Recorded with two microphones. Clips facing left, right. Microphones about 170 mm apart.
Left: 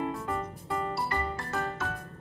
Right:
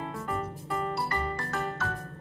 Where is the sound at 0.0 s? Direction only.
Centre (ahead or behind).